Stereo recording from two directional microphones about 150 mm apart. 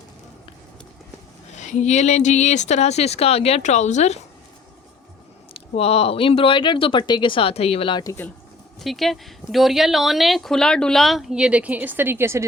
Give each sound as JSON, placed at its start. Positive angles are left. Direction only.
{"t": 1.5, "sound": "speech", "side_deg": 50}
{"t": 5.5, "sound": "speech", "side_deg": 40}
{"t": 8.0, "sound": "speech", "side_deg": 15}
{"t": 8.8, "sound": "speech", "side_deg": 0}